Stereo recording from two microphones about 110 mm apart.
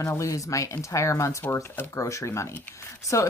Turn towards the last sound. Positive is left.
turn(degrees=30)  # may be behind; listen again after turning